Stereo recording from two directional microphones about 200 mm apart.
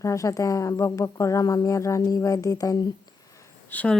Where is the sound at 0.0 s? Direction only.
15° left (ahead or behind).